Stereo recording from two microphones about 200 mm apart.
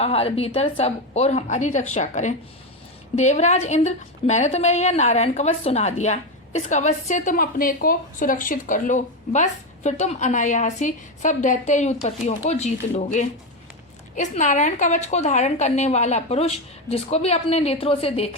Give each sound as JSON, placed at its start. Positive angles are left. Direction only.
{"t": 0.0, "sound": "a woman's voice", "side_deg": 30}